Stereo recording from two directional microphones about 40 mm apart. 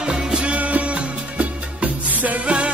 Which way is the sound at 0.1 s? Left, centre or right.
Right.